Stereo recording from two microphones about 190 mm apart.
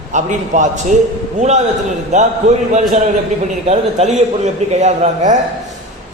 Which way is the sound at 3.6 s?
35° right (ahead or behind).